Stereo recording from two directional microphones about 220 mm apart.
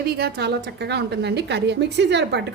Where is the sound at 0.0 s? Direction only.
45° right (ahead or behind).